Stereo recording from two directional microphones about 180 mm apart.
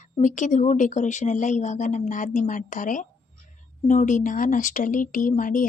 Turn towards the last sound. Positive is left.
turn(degrees=50)  # may be behind; listen again after turning